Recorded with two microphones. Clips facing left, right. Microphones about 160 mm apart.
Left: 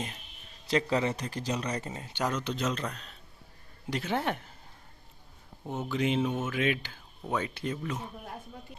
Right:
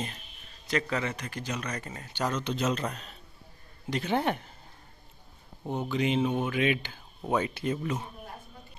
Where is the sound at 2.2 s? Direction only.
5° left (ahead or behind).